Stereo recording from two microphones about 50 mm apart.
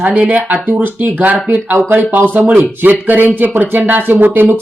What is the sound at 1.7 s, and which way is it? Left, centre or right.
Speech, right.